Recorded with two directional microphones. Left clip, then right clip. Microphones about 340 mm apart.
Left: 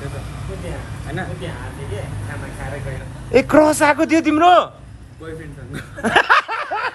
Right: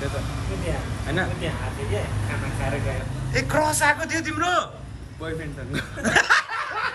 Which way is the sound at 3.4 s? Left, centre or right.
Centre.